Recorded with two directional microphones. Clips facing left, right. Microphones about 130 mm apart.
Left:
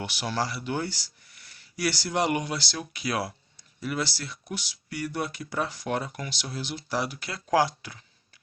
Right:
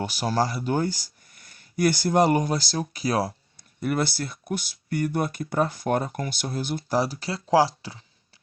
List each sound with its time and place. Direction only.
0.0 s speech: 40° right (ahead or behind)
3.8 s speech: 50° right (ahead or behind); by 7.9 s 30° right (ahead or behind)